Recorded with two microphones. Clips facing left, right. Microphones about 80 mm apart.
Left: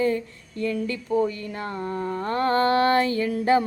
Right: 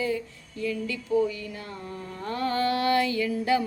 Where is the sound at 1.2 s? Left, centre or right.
Left.